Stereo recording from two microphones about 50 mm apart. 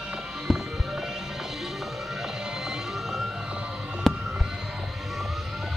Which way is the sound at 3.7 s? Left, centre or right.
Centre.